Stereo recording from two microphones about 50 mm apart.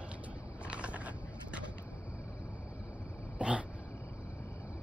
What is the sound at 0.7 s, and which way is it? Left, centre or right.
Vehicle, right.